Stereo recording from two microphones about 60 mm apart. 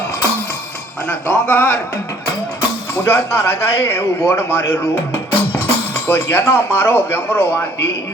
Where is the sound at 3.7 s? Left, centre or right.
Left.